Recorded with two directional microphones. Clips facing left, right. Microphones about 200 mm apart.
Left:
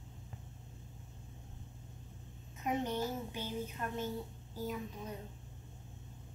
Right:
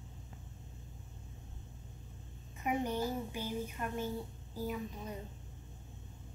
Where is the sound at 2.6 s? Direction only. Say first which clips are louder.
Right 1 dB; 10° right (ahead or behind).